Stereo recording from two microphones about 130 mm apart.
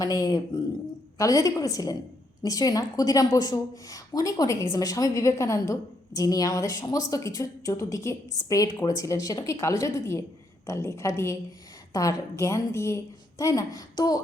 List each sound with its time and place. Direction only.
0.2 s a woman's voice: 30° left (ahead or behind)